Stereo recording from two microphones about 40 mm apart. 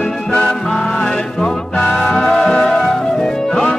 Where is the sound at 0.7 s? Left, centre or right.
Centre.